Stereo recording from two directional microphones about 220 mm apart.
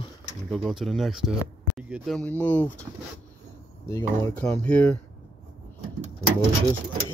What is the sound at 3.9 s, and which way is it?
Speech, 15° left (ahead or behind).